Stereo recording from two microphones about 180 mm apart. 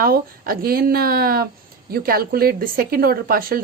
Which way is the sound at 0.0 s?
55° right (ahead or behind).